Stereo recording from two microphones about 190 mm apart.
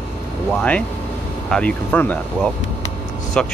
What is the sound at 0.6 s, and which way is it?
Speech, 5° left (ahead or behind).